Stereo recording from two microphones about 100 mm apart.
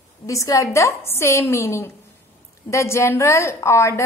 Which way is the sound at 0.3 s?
30° left (ahead or behind).